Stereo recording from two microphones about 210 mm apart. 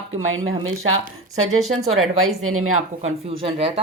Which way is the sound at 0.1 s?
70° right (ahead or behind).